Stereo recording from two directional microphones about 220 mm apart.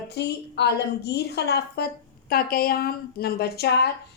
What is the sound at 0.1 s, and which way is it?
A woman's voice, 50° left (ahead or behind).